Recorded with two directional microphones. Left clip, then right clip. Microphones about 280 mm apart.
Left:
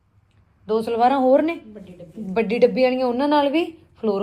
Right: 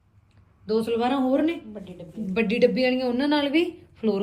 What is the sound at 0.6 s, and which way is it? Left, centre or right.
Speech, centre.